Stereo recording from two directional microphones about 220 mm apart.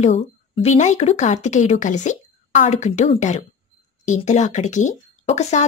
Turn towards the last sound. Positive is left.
turn(degrees=30)  # may be behind; listen again after turning